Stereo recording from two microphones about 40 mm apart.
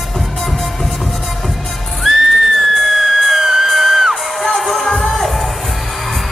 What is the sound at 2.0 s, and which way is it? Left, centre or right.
Music, centre.